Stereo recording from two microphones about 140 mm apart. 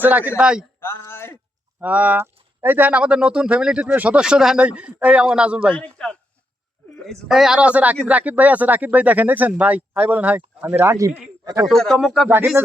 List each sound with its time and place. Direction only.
0.0 s speech: 10° right (ahead or behind)
0.8 s speech: 15° left (ahead or behind)
1.8 s speech: 10° right (ahead or behind)
5.7 s a man's voice: 10° left (ahead or behind); by 11.1 s 20° right (ahead or behind)
11.6 s speech: 5° left (ahead or behind)